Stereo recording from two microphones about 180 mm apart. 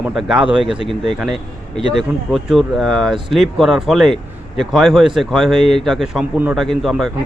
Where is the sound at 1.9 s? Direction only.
Centre (ahead or behind).